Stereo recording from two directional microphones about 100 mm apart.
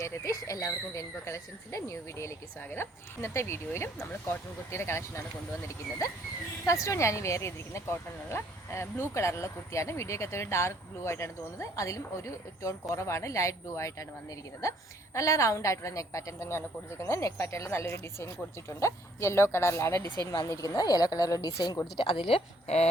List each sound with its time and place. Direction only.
0.0 s speech: 30° left (ahead or behind)
6.7 s a woman's voice: 30° left (ahead or behind)
20.3 s a woman's voice: 35° left (ahead or behind); by 22.9 s 90° left